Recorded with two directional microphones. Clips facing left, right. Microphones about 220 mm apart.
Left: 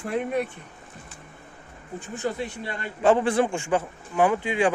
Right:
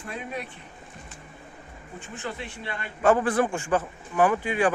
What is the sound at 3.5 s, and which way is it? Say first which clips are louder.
Speech: left 1 dB; 10° left (ahead or behind).